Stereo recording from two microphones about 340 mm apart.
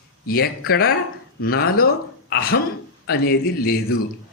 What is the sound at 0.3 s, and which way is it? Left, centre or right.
A woman's voice, left.